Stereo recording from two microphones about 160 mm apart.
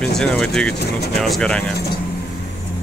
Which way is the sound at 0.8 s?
90° left.